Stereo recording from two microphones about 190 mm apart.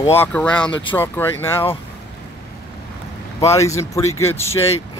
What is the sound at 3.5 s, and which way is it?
Speech, 15° left (ahead or behind).